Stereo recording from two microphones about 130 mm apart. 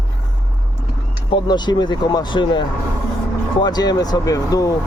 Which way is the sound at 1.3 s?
35° left (ahead or behind).